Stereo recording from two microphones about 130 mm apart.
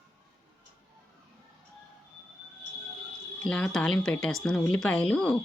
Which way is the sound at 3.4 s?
5° left (ahead or behind).